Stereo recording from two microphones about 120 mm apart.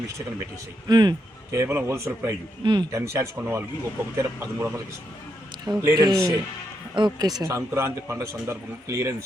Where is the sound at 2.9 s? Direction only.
25° right (ahead or behind).